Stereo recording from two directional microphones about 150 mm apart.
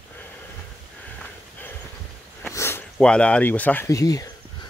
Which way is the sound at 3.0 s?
5° left (ahead or behind).